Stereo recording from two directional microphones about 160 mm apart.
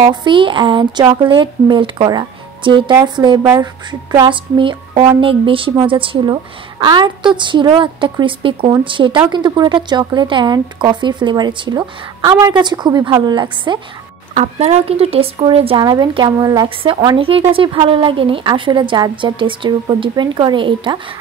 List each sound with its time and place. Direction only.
0.0 s speech: 30° right (ahead or behind)
4.3 s speech: 30° right (ahead or behind)
14.3 s speech: 40° right (ahead or behind)